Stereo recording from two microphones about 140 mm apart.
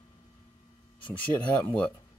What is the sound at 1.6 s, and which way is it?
Speech, 10° left (ahead or behind).